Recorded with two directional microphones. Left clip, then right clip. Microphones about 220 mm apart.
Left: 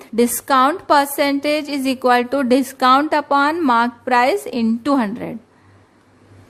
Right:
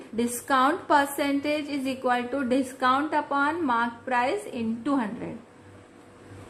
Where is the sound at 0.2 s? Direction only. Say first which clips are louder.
Left 9 dB; 40° left (ahead or behind).